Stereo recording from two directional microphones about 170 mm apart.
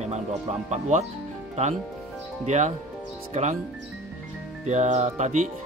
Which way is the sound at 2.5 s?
45° right (ahead or behind).